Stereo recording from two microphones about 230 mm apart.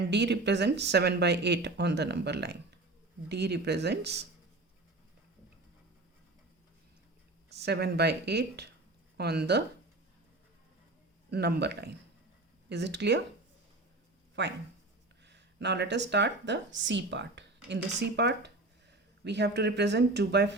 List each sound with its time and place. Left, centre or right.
0.0 s speech: right
7.5 s speech: right
11.3 s speech: right
14.4 s speech: right